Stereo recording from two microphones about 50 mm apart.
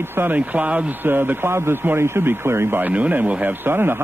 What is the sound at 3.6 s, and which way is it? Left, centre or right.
Speech, right.